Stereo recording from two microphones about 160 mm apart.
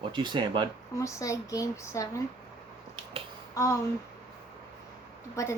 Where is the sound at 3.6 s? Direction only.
20° left (ahead or behind).